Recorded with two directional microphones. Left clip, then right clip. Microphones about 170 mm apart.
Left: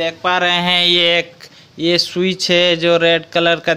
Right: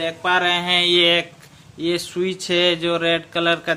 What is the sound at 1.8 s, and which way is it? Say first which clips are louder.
Speech: left 7 dB; 40° left (ahead or behind).